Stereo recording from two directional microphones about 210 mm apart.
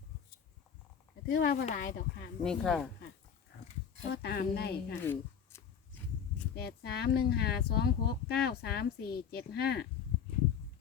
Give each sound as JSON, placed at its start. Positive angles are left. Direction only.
{"t": 1.3, "sound": "speech", "side_deg": 45}
{"t": 2.4, "sound": "speech", "side_deg": 0}
{"t": 4.1, "sound": "speech", "side_deg": 50}
{"t": 5.0, "sound": "a sound", "side_deg": 10}
{"t": 6.6, "sound": "speech", "side_deg": 50}